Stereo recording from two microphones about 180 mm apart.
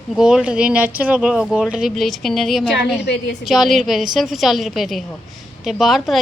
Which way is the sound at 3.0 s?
70° left (ahead or behind).